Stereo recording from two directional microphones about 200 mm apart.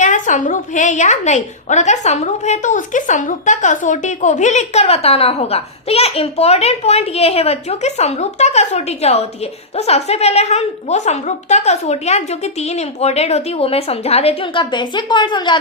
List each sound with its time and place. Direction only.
0.0 s a woman's voice: 40° left (ahead or behind); by 15.5 s 20° left (ahead or behind)